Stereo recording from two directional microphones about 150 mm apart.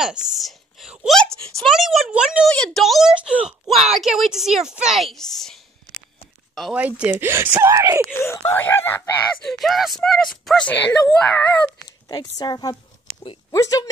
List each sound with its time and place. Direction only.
0.0 s a sound: 5° right (ahead or behind)
2.5 s a woman's voice: 5° left (ahead or behind)
7.0 s speech: 15° right (ahead or behind)
8.1 s speech: 15° left (ahead or behind)
9.5 s a woman's voice: centre (ahead or behind)
12.1 s a woman's voice: 25° left (ahead or behind)